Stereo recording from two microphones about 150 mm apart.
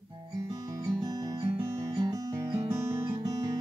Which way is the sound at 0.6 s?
25° right (ahead or behind).